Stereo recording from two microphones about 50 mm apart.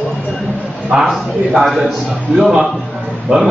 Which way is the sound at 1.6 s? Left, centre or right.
Centre.